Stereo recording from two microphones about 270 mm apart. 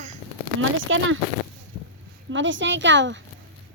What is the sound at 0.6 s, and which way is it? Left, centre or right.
Speech, right.